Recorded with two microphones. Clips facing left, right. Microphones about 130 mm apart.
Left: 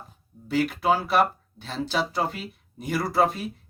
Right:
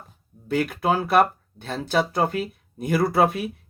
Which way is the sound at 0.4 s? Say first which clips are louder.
Even; 55° right (ahead or behind).